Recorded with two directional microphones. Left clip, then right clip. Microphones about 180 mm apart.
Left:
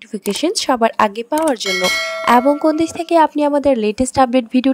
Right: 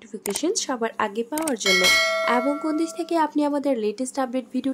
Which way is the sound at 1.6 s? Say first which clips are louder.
Left 1 dB; centre (ahead or behind).